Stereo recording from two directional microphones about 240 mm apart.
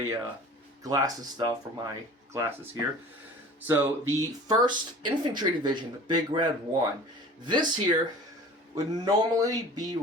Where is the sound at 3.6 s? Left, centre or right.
Centre.